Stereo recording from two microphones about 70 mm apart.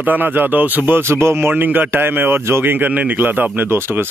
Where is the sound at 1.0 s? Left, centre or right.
Right.